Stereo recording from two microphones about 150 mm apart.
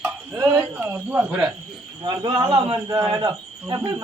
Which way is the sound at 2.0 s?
30° right (ahead or behind).